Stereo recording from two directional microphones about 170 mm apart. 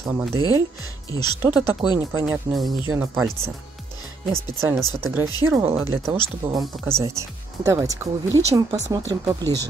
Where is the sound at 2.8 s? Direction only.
15° right (ahead or behind).